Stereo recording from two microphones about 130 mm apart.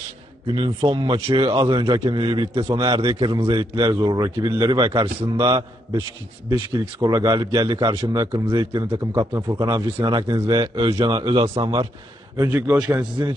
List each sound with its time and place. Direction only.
0.5 s a man's voice: 40° right (ahead or behind)
12.4 s a man's voice: 20° right (ahead or behind)